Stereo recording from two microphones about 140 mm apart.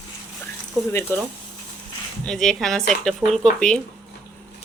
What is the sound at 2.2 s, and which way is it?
A woman's voice, 5° left (ahead or behind).